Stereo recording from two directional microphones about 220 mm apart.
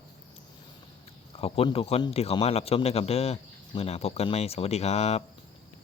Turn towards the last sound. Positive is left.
turn(degrees=30)  # may be behind; listen again after turning